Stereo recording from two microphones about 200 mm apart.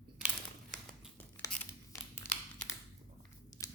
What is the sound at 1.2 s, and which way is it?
Crumpling, 10° left (ahead or behind).